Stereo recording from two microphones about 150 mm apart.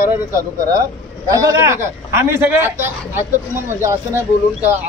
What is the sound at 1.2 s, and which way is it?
A man's voice, 20° right (ahead or behind).